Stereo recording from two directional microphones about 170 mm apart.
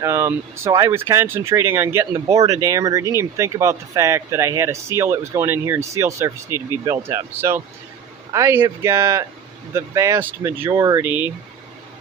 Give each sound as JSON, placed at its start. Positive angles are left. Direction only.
{"t": 0.0, "sound": "speech", "side_deg": -15}
{"t": 6.5, "sound": "speech", "side_deg": 20}
{"t": 6.8, "sound": "speech", "side_deg": -15}